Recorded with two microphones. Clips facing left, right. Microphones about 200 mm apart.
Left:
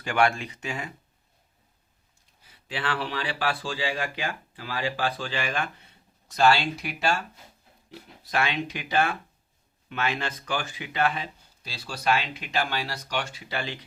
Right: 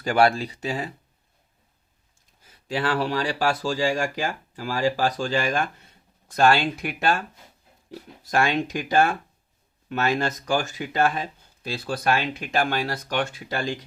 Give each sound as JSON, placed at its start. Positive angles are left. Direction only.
{"t": 0.0, "sound": "speech", "side_deg": -40}
{"t": 2.4, "sound": "speech", "side_deg": -40}